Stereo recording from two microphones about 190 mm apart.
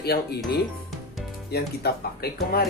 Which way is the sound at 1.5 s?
55° left (ahead or behind).